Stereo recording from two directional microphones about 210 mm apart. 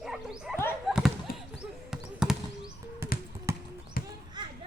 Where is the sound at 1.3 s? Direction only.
45° left (ahead or behind).